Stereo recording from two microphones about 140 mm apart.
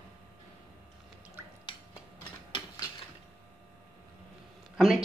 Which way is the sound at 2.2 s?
35° left (ahead or behind).